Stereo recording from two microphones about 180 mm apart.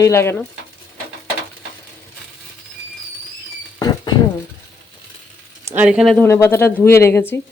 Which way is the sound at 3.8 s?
25° left (ahead or behind).